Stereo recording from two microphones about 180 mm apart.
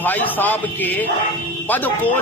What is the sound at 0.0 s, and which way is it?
A man's voice, 10° left (ahead or behind).